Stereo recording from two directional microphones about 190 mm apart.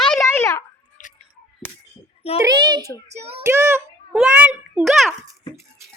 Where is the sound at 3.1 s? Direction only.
35° right (ahead or behind).